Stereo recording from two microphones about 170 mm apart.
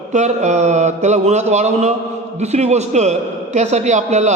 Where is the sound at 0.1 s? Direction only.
45° right (ahead or behind).